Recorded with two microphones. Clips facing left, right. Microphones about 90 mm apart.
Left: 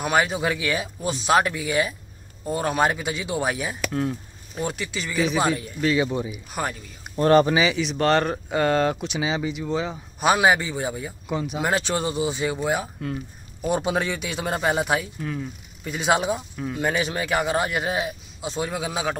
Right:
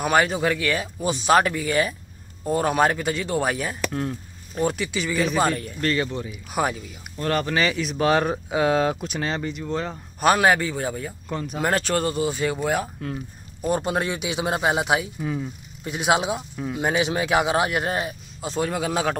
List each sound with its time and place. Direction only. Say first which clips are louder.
0.0 s speech: right 2 dB; centre (ahead or behind)
6.0 s speech: left 4 dB; 15° left (ahead or behind)
6.5 s speech: right 5 dB; 5° right (ahead or behind)
7.2 s speech: left 8 dB; 25° left (ahead or behind)
7.5 s speech: left 1 dB; centre (ahead or behind)
12.8 s speech: left 1 dB; centre (ahead or behind)
14.0 s speech: right 2 dB; 10° right (ahead or behind); by 19.1 s 5° left (ahead or behind)